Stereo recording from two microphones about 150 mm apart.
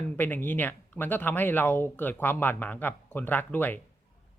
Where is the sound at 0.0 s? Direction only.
10° left (ahead or behind).